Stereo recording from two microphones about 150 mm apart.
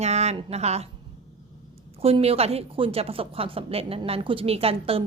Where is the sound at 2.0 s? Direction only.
40° right (ahead or behind).